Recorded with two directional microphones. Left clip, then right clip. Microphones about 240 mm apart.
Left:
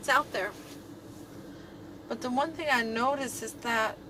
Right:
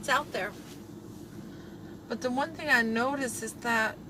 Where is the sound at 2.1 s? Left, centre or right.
Centre.